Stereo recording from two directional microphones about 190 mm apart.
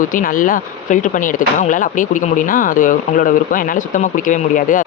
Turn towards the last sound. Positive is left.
turn(degrees=45)  # may be behind; listen again after turning